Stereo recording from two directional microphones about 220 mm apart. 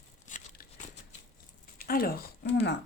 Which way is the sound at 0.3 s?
35° left (ahead or behind).